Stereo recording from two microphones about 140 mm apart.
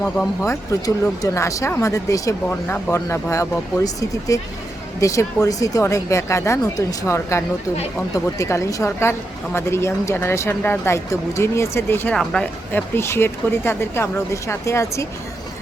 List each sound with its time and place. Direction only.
0.4 s a woman's voice: 20° left (ahead or behind)
12.1 s speech: 5° left (ahead or behind); by 15.0 s 20° left (ahead or behind)